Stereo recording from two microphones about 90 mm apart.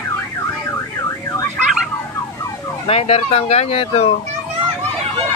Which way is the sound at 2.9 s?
90° left.